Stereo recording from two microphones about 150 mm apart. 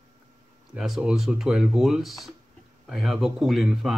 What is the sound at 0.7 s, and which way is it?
Speech, centre (ahead or behind).